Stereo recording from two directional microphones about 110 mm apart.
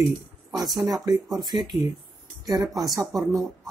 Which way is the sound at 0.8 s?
35° right (ahead or behind).